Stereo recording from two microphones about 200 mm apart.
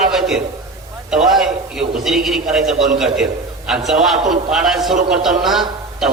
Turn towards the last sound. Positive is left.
turn(degrees=0)  # may be behind; listen again after turning